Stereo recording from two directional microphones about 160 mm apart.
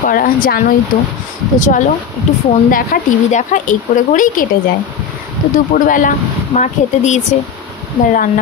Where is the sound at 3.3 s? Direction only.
50° left (ahead or behind).